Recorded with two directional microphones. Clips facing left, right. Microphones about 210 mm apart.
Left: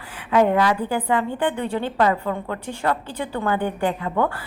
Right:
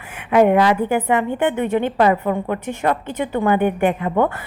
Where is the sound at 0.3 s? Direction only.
15° right (ahead or behind).